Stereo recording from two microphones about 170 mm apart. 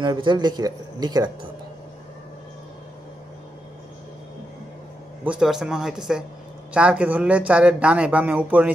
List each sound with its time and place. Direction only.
0.0 s speech: 25° right (ahead or behind)
5.2 s speech: 5° right (ahead or behind)